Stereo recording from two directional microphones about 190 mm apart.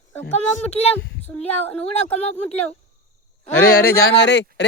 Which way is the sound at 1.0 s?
65° left (ahead or behind).